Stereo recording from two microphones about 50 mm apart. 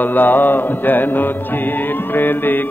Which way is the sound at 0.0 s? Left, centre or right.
Left.